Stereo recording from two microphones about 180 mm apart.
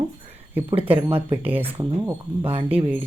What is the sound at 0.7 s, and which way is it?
Speech, 30° right (ahead or behind).